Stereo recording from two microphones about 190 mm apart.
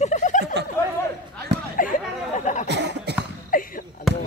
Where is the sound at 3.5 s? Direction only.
45° left (ahead or behind).